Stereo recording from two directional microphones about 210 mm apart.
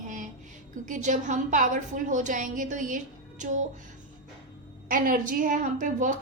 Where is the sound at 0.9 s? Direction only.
35° right (ahead or behind).